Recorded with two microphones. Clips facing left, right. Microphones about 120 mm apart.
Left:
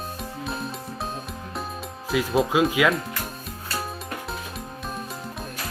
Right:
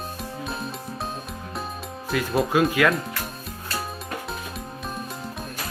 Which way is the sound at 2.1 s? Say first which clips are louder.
Left 1 dB; 5° left (ahead or behind).